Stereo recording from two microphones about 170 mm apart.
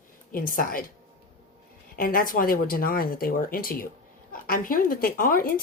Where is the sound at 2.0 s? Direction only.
55° left (ahead or behind).